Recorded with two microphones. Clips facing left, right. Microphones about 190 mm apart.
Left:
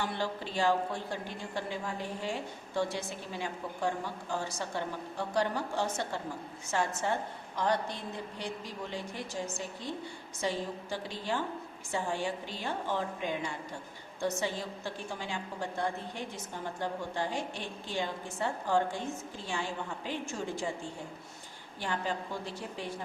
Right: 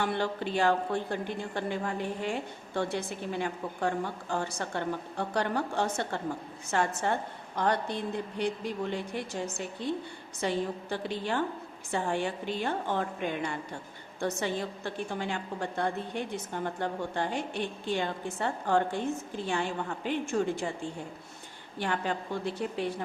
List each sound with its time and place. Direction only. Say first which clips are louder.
0.0 s speech: right 4 dB; 60° right (ahead or behind)
21.8 s speech: right 3 dB; 65° right (ahead or behind)